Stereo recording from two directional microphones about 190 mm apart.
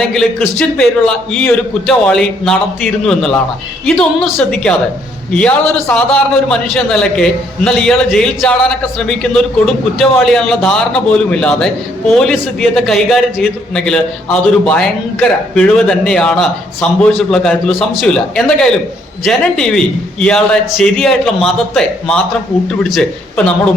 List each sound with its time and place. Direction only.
0.0 s a man's voice: 5° left (ahead or behind)